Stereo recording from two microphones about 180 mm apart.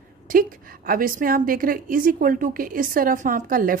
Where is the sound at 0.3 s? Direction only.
50° right (ahead or behind).